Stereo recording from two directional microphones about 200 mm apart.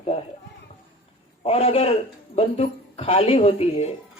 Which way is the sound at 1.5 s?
30° left (ahead or behind).